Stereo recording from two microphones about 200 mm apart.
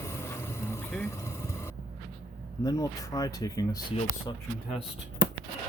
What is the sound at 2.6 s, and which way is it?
Speech, 20° left (ahead or behind).